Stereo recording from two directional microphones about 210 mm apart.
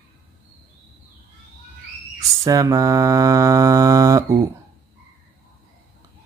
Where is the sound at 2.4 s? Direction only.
15° right (ahead or behind).